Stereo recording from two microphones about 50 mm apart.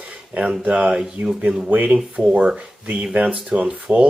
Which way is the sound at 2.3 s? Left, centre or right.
Right.